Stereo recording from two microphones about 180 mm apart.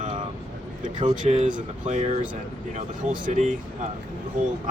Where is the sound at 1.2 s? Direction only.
40° right (ahead or behind).